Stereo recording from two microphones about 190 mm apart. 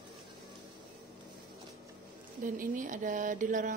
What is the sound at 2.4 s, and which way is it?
Speech, 45° right (ahead or behind).